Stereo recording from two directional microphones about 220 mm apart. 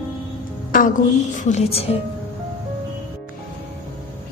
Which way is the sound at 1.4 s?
30° left (ahead or behind).